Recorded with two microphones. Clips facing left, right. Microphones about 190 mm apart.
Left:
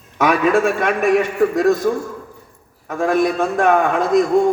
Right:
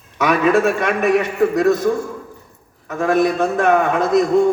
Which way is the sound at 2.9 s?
45° left (ahead or behind).